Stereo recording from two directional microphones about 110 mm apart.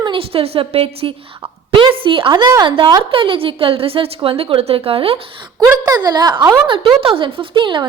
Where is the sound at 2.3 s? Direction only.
40° right (ahead or behind).